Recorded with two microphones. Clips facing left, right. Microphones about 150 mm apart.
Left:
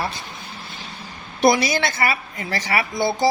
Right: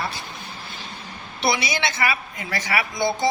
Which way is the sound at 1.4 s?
45° left (ahead or behind).